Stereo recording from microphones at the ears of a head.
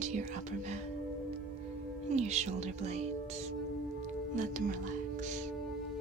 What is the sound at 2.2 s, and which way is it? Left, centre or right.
Speech, right.